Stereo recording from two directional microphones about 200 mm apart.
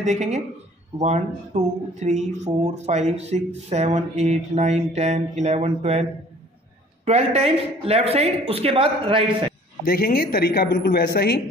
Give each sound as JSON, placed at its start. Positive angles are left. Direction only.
{"t": 0.0, "sound": "speech", "side_deg": -35}
{"t": 7.1, "sound": "speech", "side_deg": -30}
{"t": 9.8, "sound": "a man's voice", "side_deg": 50}